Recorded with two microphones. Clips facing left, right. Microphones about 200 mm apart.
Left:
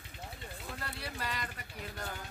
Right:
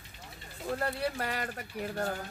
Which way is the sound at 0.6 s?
60° right (ahead or behind).